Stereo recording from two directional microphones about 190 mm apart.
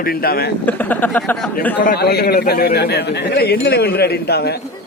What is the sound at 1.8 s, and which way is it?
A man's voice, 50° left (ahead or behind).